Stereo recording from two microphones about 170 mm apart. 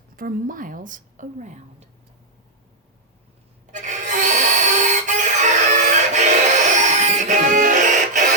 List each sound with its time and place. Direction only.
0.2 s a woman's voice: 55° right (ahead or behind)
3.7 s music: 45° right (ahead or behind)